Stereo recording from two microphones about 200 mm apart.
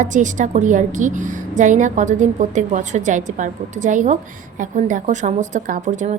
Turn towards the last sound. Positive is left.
turn(degrees=-40)  # may be behind; listen again after turning